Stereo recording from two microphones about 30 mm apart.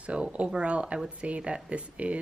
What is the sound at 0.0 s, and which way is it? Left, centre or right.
Speech, right.